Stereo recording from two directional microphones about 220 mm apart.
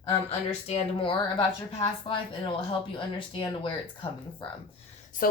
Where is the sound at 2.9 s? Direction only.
25° left (ahead or behind).